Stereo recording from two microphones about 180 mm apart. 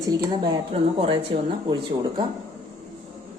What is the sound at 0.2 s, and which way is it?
A woman's voice, 25° right (ahead or behind).